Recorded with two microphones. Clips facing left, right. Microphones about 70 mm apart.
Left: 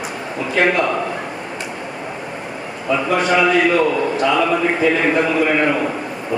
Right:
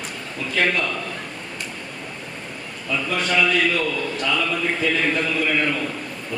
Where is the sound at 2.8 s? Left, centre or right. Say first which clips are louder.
Left 7 dB; left.